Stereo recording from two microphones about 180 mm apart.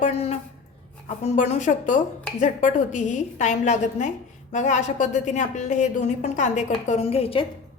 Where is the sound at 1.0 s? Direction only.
40° left (ahead or behind).